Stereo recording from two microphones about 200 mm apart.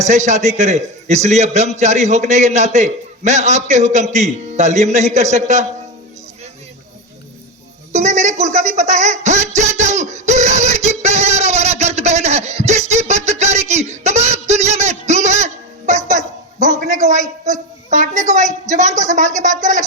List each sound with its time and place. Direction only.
0.0 s a man's voice: 35° right (ahead or behind)
7.9 s a man's voice: 35° right (ahead or behind)
9.6 s a sound: 35° right (ahead or behind)
16.6 s a man's voice: 35° right (ahead or behind)